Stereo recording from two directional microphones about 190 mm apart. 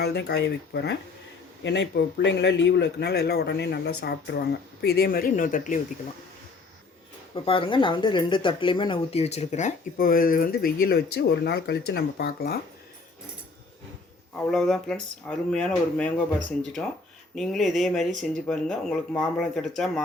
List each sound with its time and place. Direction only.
0.0 s a man's voice: 60° left (ahead or behind)
7.3 s speech: 30° left (ahead or behind); by 12.5 s 55° left (ahead or behind)
14.3 s speech: 5° left (ahead or behind)
17.3 s speech: centre (ahead or behind)